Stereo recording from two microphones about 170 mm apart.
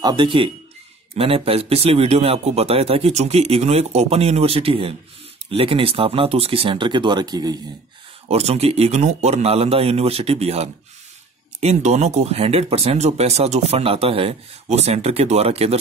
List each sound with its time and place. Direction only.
0.0 s speech: 25° right (ahead or behind)
8.3 s speech: 40° right (ahead or behind)